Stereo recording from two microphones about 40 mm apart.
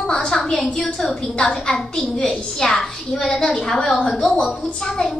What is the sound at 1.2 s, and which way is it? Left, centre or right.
Speech, left.